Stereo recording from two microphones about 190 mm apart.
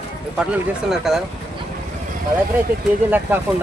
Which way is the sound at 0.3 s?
5° right (ahead or behind).